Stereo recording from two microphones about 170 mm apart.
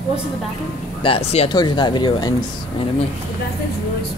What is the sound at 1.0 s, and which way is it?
Speech, 35° left (ahead or behind).